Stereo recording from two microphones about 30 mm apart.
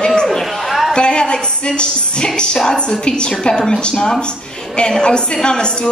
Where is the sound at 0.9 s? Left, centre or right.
Left.